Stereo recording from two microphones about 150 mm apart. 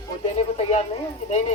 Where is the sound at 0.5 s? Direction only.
45° left (ahead or behind).